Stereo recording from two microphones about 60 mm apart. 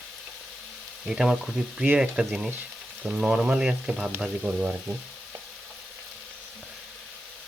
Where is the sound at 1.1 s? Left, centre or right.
Centre.